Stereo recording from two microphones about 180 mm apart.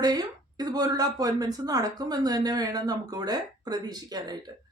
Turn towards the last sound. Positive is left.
turn(degrees=-20)  # may be behind; listen again after turning